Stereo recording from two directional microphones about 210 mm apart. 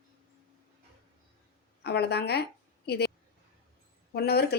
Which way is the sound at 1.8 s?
50° left (ahead or behind).